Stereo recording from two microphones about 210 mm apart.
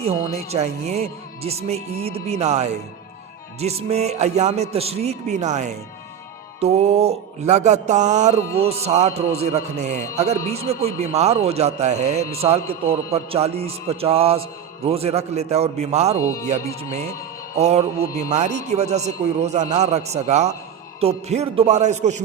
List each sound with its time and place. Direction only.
0.0 s a man's voice: 30° right (ahead or behind)
16.2 s music: 15° left (ahead or behind)
16.5 s speech: 30° right (ahead or behind)